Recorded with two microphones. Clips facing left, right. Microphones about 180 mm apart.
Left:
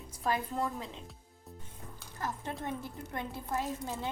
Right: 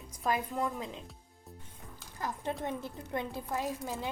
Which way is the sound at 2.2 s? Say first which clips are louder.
Right 2 dB; 15° right (ahead or behind).